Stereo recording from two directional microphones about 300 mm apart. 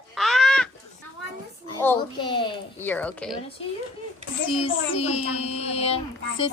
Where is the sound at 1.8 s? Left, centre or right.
Centre.